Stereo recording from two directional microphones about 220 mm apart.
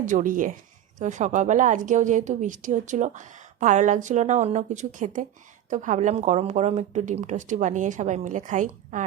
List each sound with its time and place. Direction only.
0.0 s a woman's voice: 35° right (ahead or behind)